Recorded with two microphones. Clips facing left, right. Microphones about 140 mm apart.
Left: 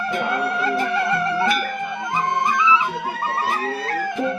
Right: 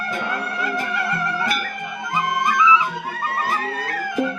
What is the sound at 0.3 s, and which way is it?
Music, 30° left (ahead or behind).